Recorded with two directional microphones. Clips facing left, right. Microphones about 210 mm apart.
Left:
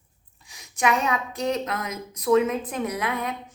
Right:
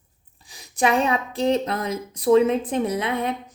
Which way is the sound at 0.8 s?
30° right (ahead or behind).